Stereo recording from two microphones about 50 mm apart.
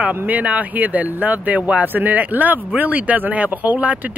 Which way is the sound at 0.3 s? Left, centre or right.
Right.